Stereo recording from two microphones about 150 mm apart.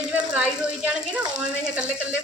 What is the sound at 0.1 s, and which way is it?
Speech, 10° right (ahead or behind).